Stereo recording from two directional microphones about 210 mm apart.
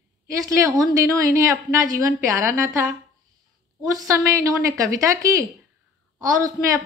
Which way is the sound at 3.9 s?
15° right (ahead or behind).